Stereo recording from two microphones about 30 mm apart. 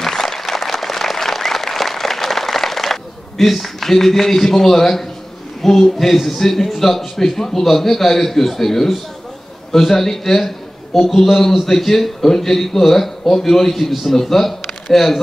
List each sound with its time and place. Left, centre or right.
0.0 s applause: centre
5.7 s a man's voice: centre